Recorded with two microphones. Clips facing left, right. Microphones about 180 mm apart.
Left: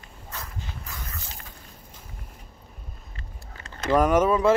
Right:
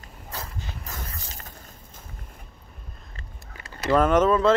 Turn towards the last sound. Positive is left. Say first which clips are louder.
# right 1 dB
turn(degrees=10)  # may be behind; listen again after turning